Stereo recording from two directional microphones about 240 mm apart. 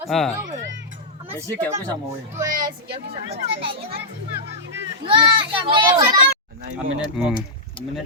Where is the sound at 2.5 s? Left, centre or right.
Right.